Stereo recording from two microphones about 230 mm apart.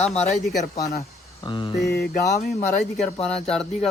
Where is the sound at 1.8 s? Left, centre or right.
Left.